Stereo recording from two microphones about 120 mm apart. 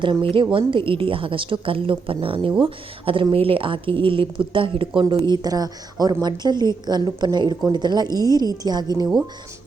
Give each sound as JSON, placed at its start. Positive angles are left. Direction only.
{"t": 0.0, "sound": "a woman's voice", "side_deg": -45}